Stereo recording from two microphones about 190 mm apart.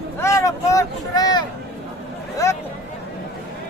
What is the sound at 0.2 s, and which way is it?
Vehicle, 15° left (ahead or behind).